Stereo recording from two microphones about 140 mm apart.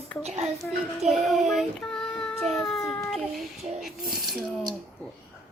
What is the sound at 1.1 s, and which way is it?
Child singing, centre (ahead or behind).